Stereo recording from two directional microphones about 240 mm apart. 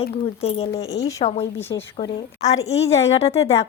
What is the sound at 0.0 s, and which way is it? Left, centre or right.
Speech, left.